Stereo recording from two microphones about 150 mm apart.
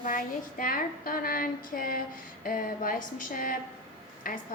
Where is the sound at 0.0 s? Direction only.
65° left (ahead or behind).